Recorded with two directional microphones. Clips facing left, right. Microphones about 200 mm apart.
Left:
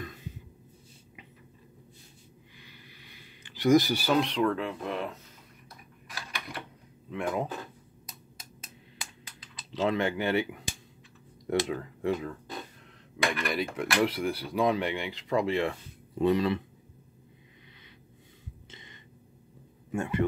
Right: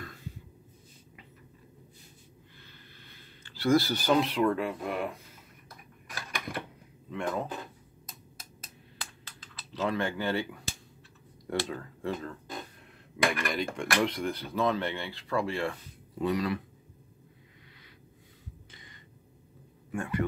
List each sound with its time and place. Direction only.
0.0 s snort: 20° left (ahead or behind)
2.6 s speech: 15° left (ahead or behind); by 5.2 s 10° right (ahead or behind)
6.1 s a sound: 50° right (ahead or behind)
7.1 s speech: 5° left (ahead or behind)
9.7 s speech: 20° left (ahead or behind)
13.3 s speech: centre (ahead or behind); by 16.6 s 25° left (ahead or behind)
18.7 s a sound: 25° left (ahead or behind)